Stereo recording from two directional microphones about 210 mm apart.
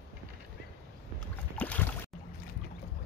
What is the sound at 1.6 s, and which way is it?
Boat, 5° left (ahead or behind).